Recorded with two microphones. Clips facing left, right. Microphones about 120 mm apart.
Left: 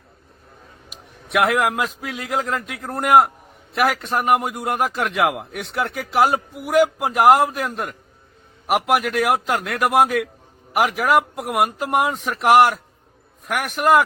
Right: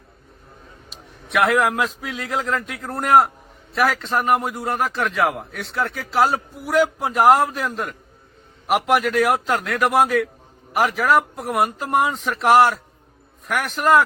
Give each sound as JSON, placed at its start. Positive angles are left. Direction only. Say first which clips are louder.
{"t": 1.3, "sound": "a man's voice", "louder": "even", "side_deg": 5}